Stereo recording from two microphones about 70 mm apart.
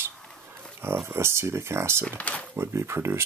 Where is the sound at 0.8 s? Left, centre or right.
Right.